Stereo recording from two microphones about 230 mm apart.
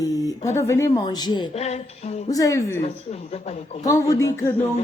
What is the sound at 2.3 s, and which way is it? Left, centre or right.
Speech, centre.